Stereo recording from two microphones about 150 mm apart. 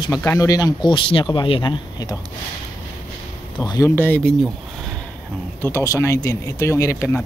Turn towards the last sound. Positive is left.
turn(degrees=20)  # may be behind; listen again after turning